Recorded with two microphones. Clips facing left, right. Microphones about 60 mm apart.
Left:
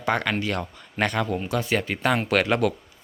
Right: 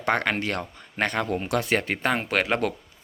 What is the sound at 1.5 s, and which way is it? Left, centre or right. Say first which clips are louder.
Speech: right 2 dB; right.